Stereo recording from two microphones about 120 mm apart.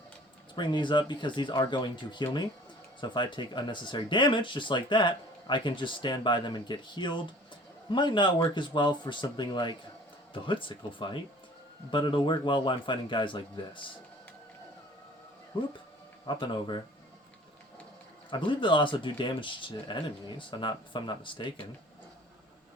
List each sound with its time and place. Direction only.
0.5 s speech: 40° left (ahead or behind)
15.5 s speech: 45° left (ahead or behind)
18.3 s speech: 45° left (ahead or behind)